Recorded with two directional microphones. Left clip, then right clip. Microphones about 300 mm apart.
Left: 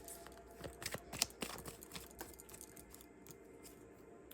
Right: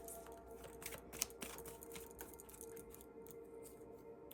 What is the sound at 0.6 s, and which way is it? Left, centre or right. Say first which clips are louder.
Music: left 8 dB; centre.